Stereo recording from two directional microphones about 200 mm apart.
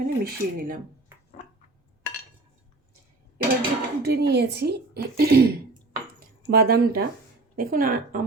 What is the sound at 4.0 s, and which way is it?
A woman's voice, 50° right (ahead or behind).